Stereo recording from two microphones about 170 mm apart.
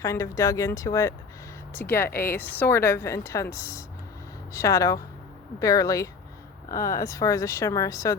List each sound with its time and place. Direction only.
0.0 s a woman's voice: 20° left (ahead or behind)